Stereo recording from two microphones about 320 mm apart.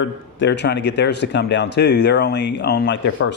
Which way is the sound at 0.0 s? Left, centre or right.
Left.